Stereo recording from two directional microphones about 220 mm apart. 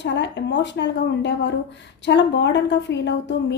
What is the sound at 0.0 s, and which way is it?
A woman's voice, 55° left (ahead or behind).